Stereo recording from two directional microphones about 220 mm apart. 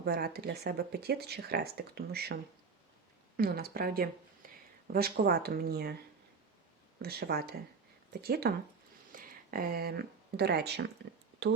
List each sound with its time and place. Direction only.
0.0 s speech: 45° right (ahead or behind)
4.4 s a sound: 40° right (ahead or behind)
4.9 s speech: 45° right (ahead or behind)
7.0 s speech: 45° right (ahead or behind)